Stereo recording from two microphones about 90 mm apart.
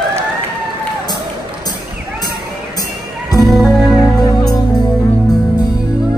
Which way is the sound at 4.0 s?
45° left (ahead or behind).